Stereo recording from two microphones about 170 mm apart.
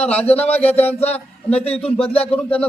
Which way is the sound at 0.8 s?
40° left (ahead or behind).